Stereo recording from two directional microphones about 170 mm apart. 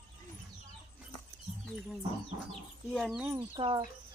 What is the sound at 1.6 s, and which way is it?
Speech, centre (ahead or behind).